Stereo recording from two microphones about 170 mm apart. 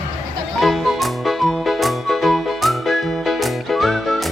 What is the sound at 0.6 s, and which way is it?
Music, centre (ahead or behind).